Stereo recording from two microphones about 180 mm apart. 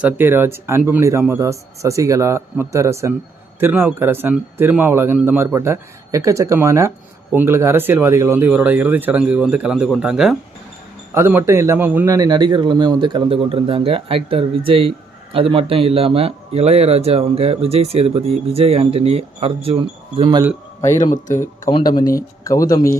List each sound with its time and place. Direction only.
0.0 s a man's voice: 10° right (ahead or behind); by 20.4 s 30° right (ahead or behind)
21.7 s speech: 25° left (ahead or behind)